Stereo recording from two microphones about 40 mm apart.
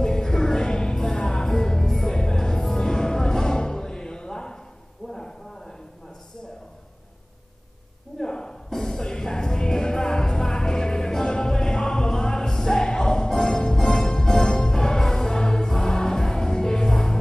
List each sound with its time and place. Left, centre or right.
0.0 s music: centre
5.0 s a sound: centre
8.2 s music: centre